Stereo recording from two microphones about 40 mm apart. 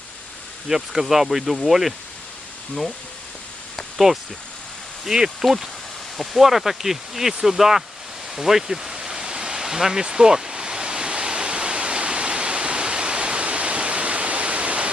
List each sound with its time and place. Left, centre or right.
0.7 s speech: centre
3.8 s a sound: centre
5.0 s speech: centre
8.4 s pink noise: centre; by 14.8 s right